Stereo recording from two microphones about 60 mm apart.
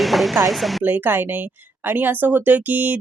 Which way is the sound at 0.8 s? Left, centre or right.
Right.